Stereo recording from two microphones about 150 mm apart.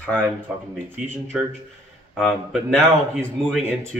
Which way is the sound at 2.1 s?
Centre (ahead or behind).